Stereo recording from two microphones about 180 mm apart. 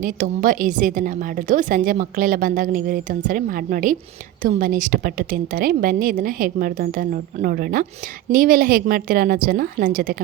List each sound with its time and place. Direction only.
0.0 s a woman's voice: 50° right (ahead or behind)